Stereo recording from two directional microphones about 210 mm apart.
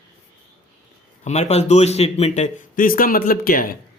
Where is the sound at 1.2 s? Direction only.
35° left (ahead or behind).